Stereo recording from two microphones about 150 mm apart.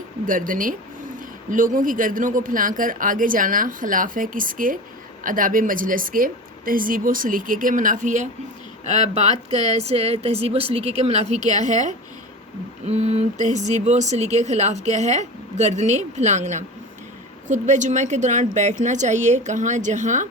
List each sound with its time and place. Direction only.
0.3 s speech: 65° right (ahead or behind)